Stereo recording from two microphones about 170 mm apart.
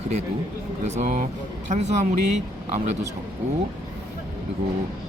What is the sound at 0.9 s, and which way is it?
Speech, 45° right (ahead or behind).